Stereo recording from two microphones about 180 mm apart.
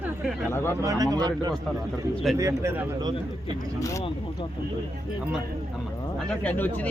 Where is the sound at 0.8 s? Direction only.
20° right (ahead or behind).